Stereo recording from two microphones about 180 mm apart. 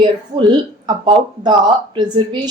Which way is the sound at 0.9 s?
25° right (ahead or behind).